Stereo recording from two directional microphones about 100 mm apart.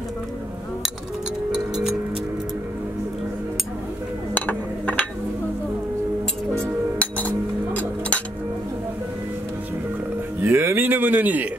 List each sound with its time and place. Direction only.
4.3 s chink: 20° left (ahead or behind)
6.6 s music: 15° left (ahead or behind)
10.4 s a sound: 25° right (ahead or behind)